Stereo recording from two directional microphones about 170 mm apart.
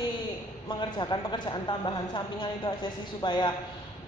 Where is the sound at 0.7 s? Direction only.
25° left (ahead or behind).